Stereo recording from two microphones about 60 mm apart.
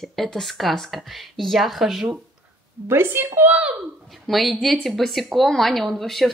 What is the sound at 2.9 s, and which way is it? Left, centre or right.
Speech, right.